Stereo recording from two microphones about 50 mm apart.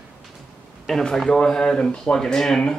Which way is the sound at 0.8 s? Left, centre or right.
Centre.